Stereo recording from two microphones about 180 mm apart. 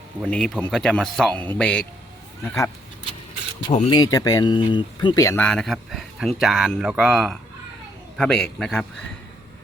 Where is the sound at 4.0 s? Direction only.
20° left (ahead or behind); by 8.8 s 5° left (ahead or behind).